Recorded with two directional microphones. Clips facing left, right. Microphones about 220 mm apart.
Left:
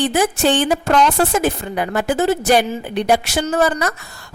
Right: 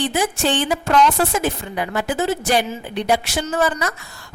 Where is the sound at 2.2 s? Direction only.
65° left (ahead or behind).